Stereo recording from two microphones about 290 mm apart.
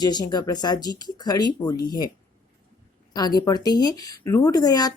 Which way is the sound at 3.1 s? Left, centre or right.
Centre.